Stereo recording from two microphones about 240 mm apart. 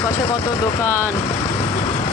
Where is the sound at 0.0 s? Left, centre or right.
Centre.